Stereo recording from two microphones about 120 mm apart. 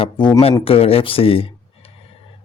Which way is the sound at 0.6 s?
55° left (ahead or behind).